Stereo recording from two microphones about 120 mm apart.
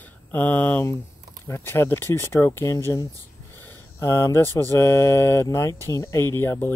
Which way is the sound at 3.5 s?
20° left (ahead or behind).